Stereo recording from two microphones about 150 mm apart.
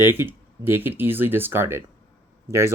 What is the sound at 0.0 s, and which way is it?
Speech, 15° right (ahead or behind).